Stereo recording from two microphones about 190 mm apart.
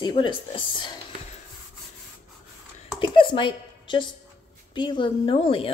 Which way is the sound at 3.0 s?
25° left (ahead or behind).